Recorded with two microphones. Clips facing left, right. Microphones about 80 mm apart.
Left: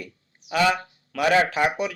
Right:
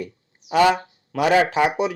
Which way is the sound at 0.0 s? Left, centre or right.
Right.